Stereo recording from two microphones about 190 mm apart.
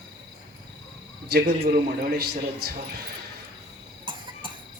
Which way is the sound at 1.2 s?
55° right (ahead or behind).